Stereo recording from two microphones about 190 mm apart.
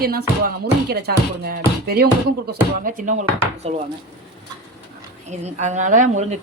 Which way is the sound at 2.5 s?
45° right (ahead or behind).